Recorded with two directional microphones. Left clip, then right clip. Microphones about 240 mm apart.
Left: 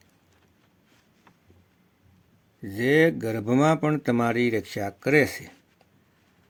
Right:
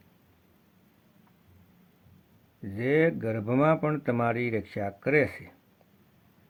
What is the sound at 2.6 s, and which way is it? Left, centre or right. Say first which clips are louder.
Speech: left 4 dB; left.